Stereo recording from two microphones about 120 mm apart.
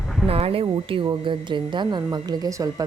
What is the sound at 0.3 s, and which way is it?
A woman's voice, 55° right (ahead or behind).